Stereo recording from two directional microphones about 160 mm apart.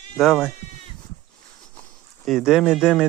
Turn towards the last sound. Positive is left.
turn(degrees=0)  # may be behind; listen again after turning